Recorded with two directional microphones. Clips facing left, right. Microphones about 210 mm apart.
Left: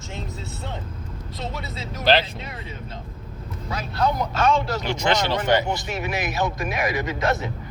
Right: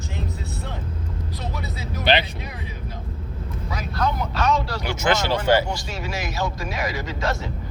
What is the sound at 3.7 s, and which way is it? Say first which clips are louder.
Vehicle: left 2 dB; 30° left (ahead or behind).